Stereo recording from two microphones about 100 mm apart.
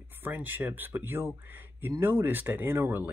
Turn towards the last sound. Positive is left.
turn(degrees=-20)  # may be behind; listen again after turning